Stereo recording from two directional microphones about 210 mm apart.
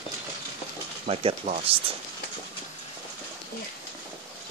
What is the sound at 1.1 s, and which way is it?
Speech, 25° right (ahead or behind).